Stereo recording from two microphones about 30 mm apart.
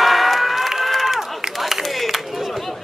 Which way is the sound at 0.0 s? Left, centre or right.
Centre.